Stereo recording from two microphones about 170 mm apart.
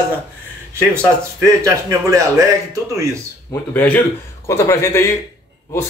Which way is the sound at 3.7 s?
10° left (ahead or behind).